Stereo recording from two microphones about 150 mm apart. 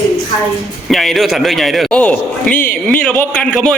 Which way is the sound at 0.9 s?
Centre (ahead or behind).